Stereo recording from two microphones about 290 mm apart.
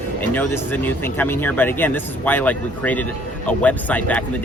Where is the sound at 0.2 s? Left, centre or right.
Centre.